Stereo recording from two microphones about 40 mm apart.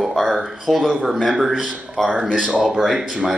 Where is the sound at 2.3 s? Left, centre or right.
Right.